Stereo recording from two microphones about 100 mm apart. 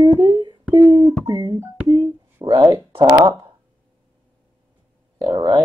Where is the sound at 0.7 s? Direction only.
35° right (ahead or behind).